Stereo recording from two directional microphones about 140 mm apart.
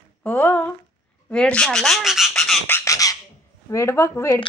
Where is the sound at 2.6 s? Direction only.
20° left (ahead or behind).